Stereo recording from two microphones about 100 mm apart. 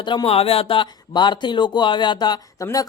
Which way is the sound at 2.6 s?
35° left (ahead or behind).